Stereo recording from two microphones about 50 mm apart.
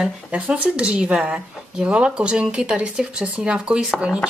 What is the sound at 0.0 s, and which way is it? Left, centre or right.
Speech, right.